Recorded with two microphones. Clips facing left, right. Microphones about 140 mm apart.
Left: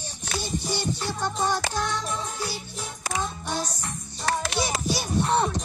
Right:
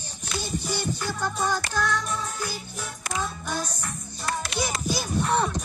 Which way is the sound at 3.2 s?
25° left (ahead or behind).